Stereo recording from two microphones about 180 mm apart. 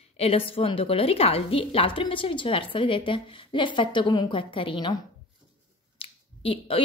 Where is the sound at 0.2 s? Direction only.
30° left (ahead or behind).